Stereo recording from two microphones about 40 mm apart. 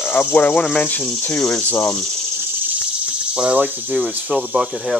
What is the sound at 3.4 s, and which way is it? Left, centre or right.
Speech, right.